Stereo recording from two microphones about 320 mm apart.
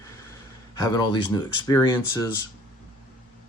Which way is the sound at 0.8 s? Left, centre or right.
Centre.